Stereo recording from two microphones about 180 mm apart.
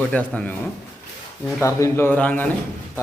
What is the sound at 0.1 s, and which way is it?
Speech, 10° left (ahead or behind).